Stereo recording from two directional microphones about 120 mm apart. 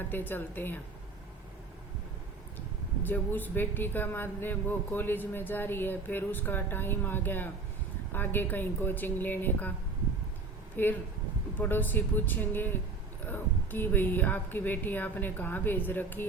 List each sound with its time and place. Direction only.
0.1 s speech: 15° left (ahead or behind)
2.6 s speech: 15° left (ahead or behind)
10.8 s speech: 15° left (ahead or behind)